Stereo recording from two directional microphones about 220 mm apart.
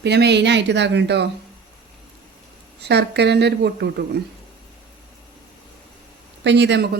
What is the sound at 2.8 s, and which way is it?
Speech, 50° right (ahead or behind).